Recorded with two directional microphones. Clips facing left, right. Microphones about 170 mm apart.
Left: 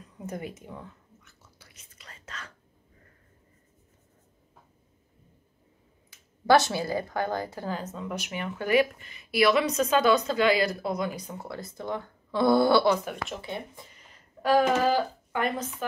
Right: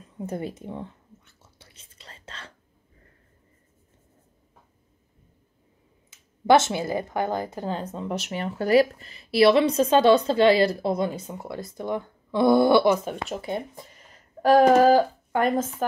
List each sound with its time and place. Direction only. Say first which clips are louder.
0.0 s whispering: right 5 dB; 30° right (ahead or behind)
6.0 s speech: right 3 dB; 20° right (ahead or behind)
13.1 s speech: right 4 dB; 35° right (ahead or behind)
14.4 s speech: right 7 dB; 40° right (ahead or behind)